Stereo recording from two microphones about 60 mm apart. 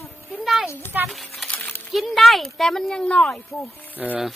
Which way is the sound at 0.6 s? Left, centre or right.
Left.